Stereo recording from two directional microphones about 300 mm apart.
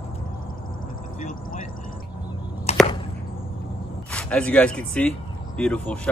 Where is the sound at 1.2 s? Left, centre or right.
Left.